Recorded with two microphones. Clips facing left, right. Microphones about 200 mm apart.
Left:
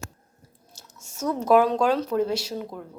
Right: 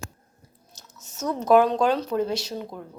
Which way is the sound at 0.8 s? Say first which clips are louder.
Left 1 dB; 10° left (ahead or behind).